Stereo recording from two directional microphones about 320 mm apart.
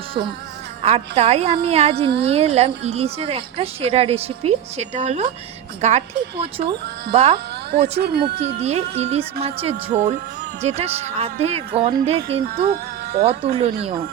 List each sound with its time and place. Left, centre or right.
0.8 s speech: centre
7.9 s speech: right